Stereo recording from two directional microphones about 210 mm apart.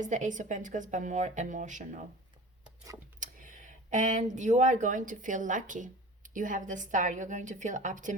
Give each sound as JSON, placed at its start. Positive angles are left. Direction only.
{"t": 0.0, "sound": "speech", "side_deg": -35}
{"t": 3.2, "sound": "speech", "side_deg": -40}